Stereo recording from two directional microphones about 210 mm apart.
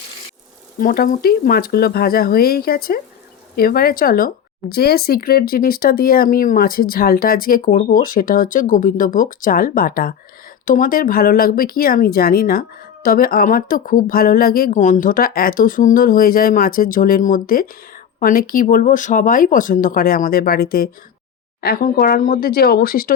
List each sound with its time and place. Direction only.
0.8 s speech: 45° left (ahead or behind)